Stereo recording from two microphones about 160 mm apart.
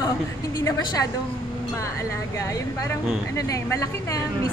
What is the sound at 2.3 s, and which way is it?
A woman's voice, 20° left (ahead or behind).